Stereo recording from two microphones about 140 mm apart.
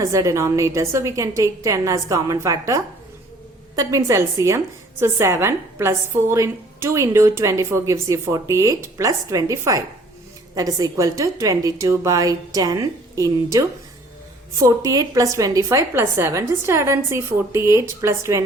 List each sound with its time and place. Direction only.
0.0 s a woman's voice: 20° right (ahead or behind)